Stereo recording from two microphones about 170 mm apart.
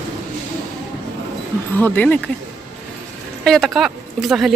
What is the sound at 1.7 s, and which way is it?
Speech, 10° left (ahead or behind).